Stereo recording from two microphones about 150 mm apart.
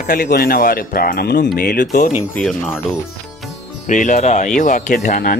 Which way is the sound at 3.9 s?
55° left (ahead or behind).